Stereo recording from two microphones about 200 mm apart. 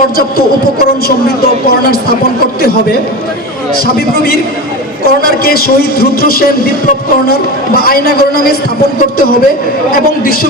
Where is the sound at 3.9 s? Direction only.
50° left (ahead or behind).